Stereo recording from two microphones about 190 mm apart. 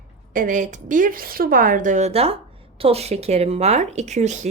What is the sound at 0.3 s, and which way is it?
A woman's voice, 45° right (ahead or behind).